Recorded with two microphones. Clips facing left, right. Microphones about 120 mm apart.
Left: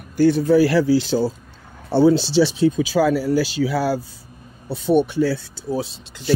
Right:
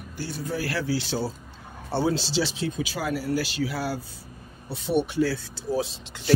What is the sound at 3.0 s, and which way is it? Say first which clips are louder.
Speech: left 10 dB; 90° left.